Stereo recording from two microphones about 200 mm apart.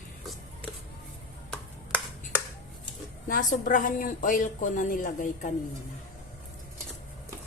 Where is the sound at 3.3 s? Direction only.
40° left (ahead or behind).